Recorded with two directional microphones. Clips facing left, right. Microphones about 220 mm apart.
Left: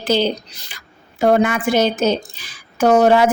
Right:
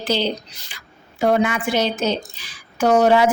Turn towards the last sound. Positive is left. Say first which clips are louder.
# left 2 dB
turn(degrees=50)  # may be behind; listen again after turning